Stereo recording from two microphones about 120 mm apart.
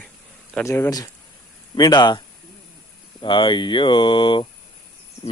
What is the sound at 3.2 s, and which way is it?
Speech, 40° left (ahead or behind).